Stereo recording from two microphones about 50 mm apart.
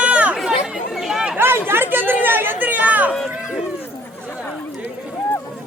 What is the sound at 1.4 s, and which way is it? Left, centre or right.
Chatter, right.